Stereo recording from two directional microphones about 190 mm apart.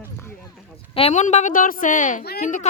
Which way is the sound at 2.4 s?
35° left (ahead or behind).